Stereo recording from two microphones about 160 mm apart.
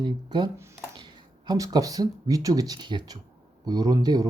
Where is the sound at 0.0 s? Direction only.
30° right (ahead or behind).